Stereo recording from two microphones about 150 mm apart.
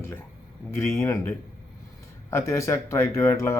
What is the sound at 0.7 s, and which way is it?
Speech, 15° left (ahead or behind).